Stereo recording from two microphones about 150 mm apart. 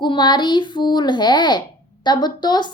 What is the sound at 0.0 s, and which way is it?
A child's voice, 30° left (ahead or behind).